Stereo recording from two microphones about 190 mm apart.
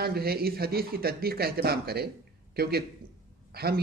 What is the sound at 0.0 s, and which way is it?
A man's voice, 55° right (ahead or behind).